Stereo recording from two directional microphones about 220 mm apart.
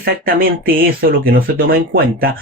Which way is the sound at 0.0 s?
40° right (ahead or behind).